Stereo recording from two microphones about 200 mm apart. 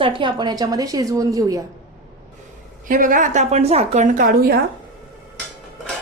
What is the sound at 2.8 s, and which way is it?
A woman's voice, 40° right (ahead or behind).